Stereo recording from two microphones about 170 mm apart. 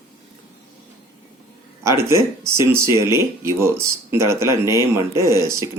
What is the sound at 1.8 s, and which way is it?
Speech, 15° right (ahead or behind).